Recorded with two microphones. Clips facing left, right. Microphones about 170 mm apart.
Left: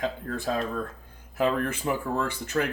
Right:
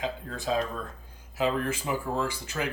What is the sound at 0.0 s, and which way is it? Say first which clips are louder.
Speech: left 3 dB; 55° left (ahead or behind).